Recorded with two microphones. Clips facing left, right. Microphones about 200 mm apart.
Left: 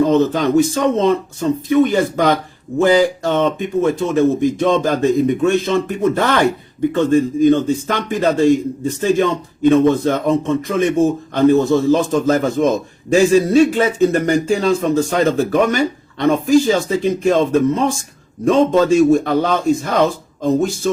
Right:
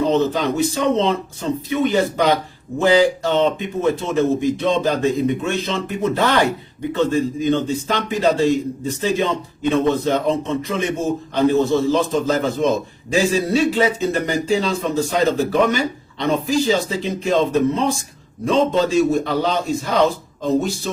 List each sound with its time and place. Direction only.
0.0 s speech: 50° left (ahead or behind)